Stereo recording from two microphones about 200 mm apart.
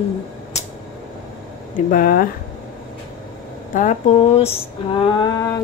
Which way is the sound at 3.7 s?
35° left (ahead or behind).